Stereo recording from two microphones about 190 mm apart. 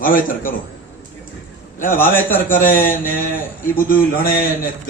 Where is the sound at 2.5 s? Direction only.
45° left (ahead or behind).